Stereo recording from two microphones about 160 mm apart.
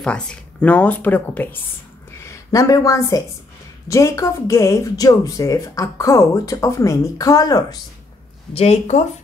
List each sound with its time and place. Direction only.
0.0 s speech: 5° left (ahead or behind); by 7.8 s 25° left (ahead or behind)
8.5 s speech: 45° left (ahead or behind)